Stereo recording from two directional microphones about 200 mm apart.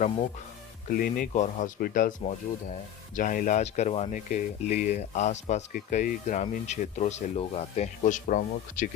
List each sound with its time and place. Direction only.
0.9 s speech: 45° left (ahead or behind)
3.2 s speech: 40° left (ahead or behind)